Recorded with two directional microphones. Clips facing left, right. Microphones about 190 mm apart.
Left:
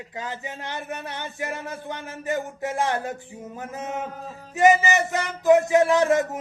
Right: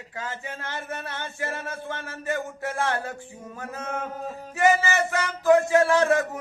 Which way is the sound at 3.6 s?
20° left (ahead or behind).